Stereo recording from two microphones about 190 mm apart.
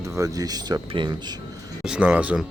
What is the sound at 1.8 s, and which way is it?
Speech, 5° right (ahead or behind).